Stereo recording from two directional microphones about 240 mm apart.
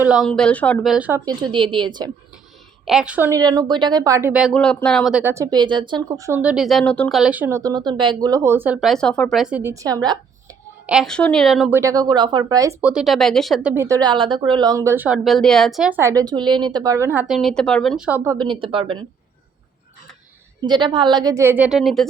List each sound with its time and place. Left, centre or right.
0.0 s speech: centre
2.8 s speech: centre
10.8 s a woman's voice: centre
11.8 s speech: centre
20.6 s speech: centre